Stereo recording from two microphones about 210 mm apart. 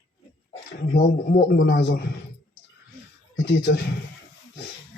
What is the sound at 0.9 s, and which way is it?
A man's voice, 45° left (ahead or behind).